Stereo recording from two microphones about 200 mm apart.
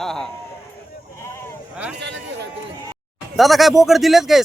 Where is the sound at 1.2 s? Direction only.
10° left (ahead or behind).